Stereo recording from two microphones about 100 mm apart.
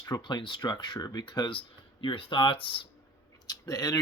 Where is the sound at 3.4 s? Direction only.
40° left (ahead or behind).